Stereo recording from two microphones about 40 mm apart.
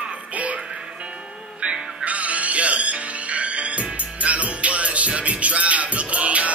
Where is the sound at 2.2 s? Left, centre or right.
Right.